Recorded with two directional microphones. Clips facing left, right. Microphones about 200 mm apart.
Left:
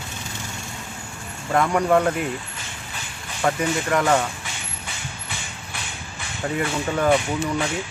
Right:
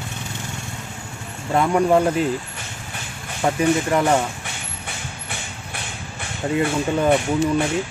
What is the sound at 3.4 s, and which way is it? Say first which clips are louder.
Speech: right 1 dB; 20° right (ahead or behind).